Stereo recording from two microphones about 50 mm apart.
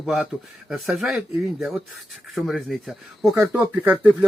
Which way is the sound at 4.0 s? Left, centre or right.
Right.